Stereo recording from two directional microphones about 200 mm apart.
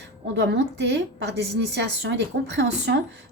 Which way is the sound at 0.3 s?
60° right (ahead or behind).